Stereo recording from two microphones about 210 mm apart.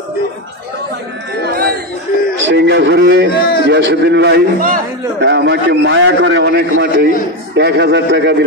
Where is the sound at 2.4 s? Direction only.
55° right (ahead or behind).